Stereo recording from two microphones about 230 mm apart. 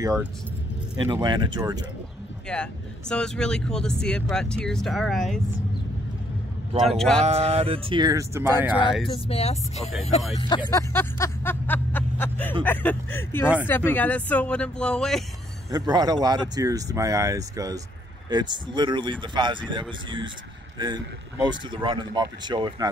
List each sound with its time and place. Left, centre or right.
1.0 s speech: centre
2.4 s speech: centre
6.8 s speech: centre
7.2 s speech: right; by 8.8 s centre
9.1 s speech: left
10.3 s music: centre
12.6 s speech: centre
15.9 s speech: centre